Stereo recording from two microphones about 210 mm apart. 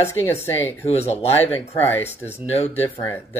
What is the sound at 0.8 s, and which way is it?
Speech, 30° left (ahead or behind).